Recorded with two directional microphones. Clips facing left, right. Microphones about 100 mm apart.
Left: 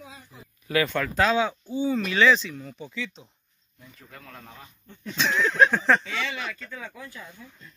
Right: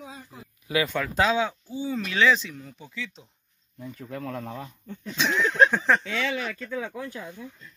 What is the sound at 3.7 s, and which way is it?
Speech, 65° right (ahead or behind).